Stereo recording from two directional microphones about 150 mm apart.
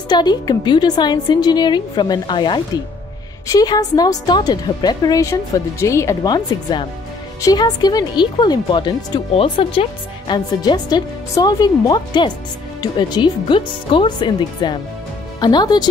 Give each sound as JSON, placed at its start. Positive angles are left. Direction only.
{"t": 0.1, "sound": "a woman's voice", "side_deg": 30}